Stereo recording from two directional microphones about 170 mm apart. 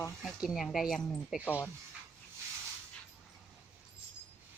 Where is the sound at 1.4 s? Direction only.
10° left (ahead or behind).